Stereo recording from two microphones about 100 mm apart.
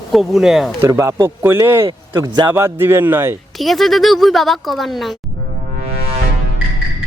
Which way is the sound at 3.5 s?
Centre (ahead or behind).